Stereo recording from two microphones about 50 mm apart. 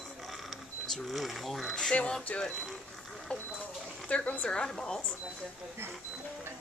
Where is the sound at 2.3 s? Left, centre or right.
Left.